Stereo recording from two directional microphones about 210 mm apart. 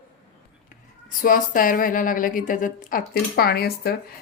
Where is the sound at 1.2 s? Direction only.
40° left (ahead or behind).